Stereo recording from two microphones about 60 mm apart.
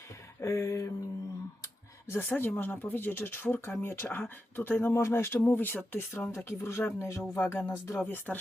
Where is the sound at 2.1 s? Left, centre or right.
Left.